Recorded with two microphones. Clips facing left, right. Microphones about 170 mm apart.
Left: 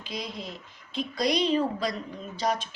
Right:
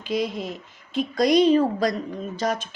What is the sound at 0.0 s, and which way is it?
A woman's voice, 50° right (ahead or behind).